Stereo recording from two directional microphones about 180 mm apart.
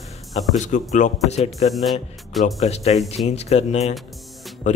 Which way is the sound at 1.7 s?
Centre (ahead or behind).